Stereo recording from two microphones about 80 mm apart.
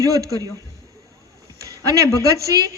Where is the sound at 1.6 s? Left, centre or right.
Right.